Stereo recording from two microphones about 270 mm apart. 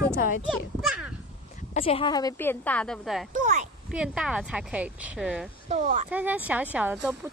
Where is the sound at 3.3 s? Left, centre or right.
Right.